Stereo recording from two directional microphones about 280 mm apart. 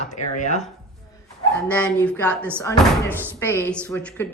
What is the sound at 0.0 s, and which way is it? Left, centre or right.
Speech, left.